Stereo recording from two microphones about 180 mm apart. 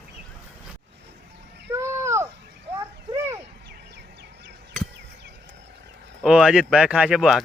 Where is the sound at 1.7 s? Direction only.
15° right (ahead or behind).